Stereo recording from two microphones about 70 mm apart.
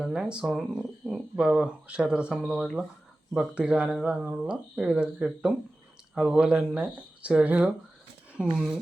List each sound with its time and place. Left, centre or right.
0.0 s speech: centre